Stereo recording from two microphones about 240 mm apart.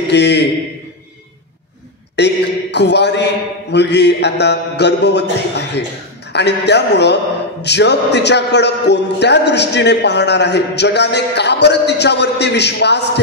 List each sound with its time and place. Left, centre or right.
0.1 s a man's voice: left
2.1 s a man's voice: left